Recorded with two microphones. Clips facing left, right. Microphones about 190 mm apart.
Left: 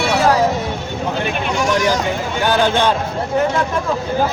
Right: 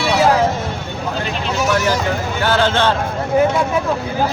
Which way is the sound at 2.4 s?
15° left (ahead or behind).